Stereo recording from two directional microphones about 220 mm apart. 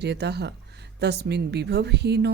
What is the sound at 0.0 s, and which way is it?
Speech, 50° right (ahead or behind).